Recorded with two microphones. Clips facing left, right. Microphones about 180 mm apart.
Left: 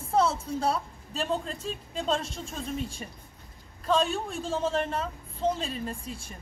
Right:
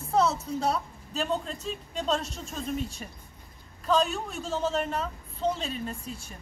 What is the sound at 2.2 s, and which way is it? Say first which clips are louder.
Speech: even; 30° left (ahead or behind).